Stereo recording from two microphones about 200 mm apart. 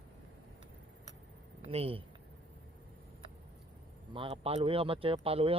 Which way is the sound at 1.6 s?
30° right (ahead or behind).